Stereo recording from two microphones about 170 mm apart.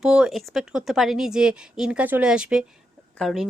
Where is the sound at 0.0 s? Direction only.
5° right (ahead or behind).